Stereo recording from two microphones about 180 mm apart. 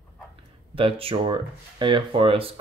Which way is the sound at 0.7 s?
30° right (ahead or behind).